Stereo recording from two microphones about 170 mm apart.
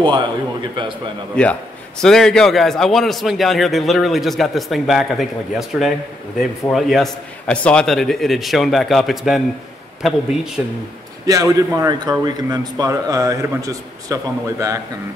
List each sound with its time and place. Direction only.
0.0 s a man's voice: 30° right (ahead or behind)
1.3 s a man's voice: 5° left (ahead or behind)
11.2 s a man's voice: 20° right (ahead or behind)